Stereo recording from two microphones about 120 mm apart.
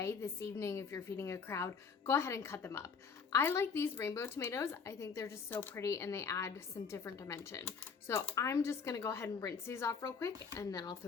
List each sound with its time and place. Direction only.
0.0 s speech: 20° left (ahead or behind)